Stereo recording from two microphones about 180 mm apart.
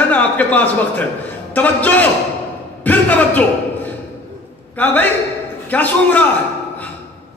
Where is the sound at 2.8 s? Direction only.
10° left (ahead or behind).